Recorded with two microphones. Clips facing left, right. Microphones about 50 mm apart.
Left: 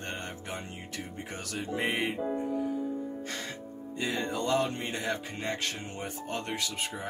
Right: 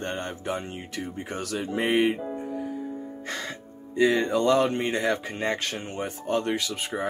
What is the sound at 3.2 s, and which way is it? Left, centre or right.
Speech, right.